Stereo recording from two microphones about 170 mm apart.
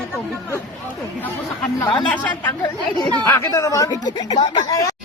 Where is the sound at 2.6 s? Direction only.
25° left (ahead or behind).